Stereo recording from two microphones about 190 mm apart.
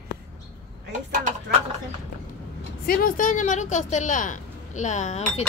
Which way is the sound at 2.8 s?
45° left (ahead or behind).